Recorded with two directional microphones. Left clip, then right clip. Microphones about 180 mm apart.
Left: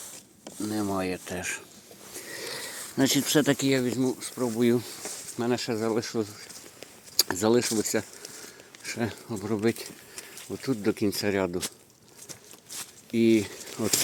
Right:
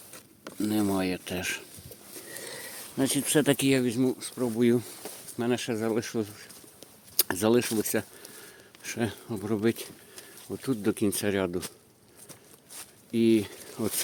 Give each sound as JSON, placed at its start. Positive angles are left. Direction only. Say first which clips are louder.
{"t": 0.7, "sound": "speech", "louder": "right 1 dB", "side_deg": -25}
{"t": 2.4, "sound": "a sound", "louder": "left 5 dB", "side_deg": 0}
{"t": 3.4, "sound": "speech", "louder": "even", "side_deg": -20}
{"t": 4.1, "sound": "speech", "louder": "left 1 dB", "side_deg": -10}
{"t": 12.3, "sound": "a sound", "louder": "left 7 dB", "side_deg": 65}
{"t": 13.1, "sound": "speech", "louder": "left 1 dB", "side_deg": 0}